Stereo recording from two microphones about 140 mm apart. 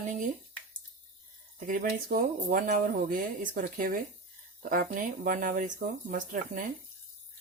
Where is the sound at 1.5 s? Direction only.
75° right (ahead or behind); by 4.0 s 90° right.